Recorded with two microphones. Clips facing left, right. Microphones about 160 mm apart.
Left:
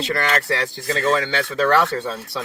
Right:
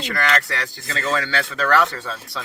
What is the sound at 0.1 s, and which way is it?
Speech, 25° left (ahead or behind).